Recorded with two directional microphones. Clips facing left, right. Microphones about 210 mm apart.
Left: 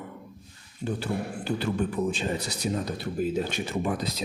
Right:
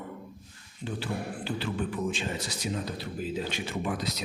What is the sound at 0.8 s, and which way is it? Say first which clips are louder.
Speech: left 4 dB; 45° left (ahead or behind).